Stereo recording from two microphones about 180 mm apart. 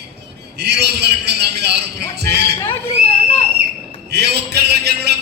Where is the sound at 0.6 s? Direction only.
70° right (ahead or behind).